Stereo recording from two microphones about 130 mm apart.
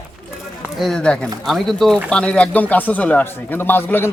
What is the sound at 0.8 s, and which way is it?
Speech, 5° left (ahead or behind).